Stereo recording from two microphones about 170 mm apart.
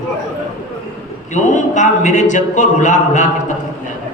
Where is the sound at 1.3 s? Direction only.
45° left (ahead or behind).